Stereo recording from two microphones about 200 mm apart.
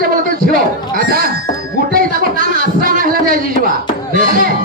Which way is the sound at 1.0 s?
45° right (ahead or behind).